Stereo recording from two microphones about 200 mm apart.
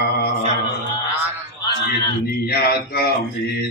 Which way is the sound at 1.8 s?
50° left (ahead or behind).